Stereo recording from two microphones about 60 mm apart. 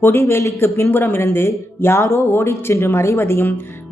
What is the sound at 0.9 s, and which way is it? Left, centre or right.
Speech, left.